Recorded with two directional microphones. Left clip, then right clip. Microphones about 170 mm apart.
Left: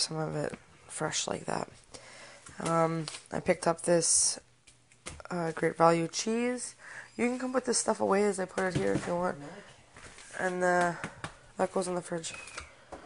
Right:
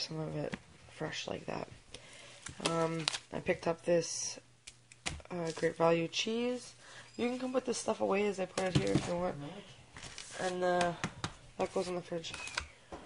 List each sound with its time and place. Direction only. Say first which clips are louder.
0.0 s speech: left 6 dB; 25° left (ahead or behind)
10.3 s speech: left 5 dB; 35° left (ahead or behind)